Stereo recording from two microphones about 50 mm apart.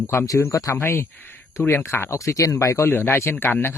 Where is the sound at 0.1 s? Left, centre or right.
Left.